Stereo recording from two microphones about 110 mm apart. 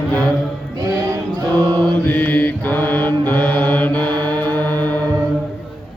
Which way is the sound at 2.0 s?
15° left (ahead or behind).